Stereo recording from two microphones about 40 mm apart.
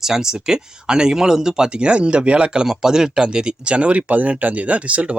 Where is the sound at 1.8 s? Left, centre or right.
Right.